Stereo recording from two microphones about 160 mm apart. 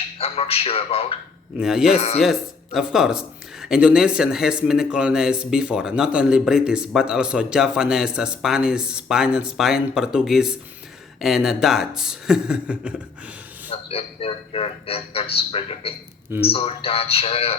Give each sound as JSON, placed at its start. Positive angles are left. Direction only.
{"t": 0.2, "sound": "speech", "side_deg": 40}
{"t": 1.5, "sound": "speech", "side_deg": -5}
{"t": 2.0, "sound": "speech", "side_deg": 40}
{"t": 2.2, "sound": "speech", "side_deg": 0}
{"t": 13.9, "sound": "speech", "side_deg": 35}